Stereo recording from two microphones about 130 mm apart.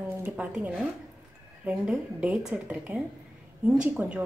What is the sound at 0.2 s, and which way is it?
A woman's voice, 10° right (ahead or behind).